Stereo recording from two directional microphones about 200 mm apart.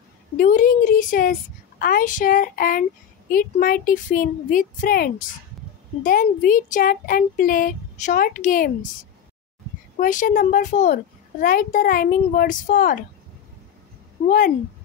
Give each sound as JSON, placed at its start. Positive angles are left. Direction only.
{"t": 0.4, "sound": "speech", "side_deg": 45}
{"t": 9.9, "sound": "a child's voice", "side_deg": 40}
{"t": 14.2, "sound": "a child's voice", "side_deg": 40}